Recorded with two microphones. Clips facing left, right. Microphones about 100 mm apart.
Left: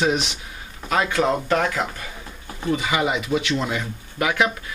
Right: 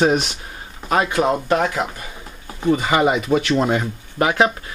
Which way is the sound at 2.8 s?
45° right (ahead or behind).